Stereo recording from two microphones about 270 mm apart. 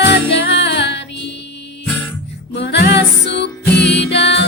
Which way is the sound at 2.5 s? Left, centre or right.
Left.